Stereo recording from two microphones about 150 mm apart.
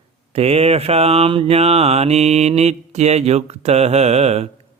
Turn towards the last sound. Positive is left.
turn(degrees=-45)  # may be behind; listen again after turning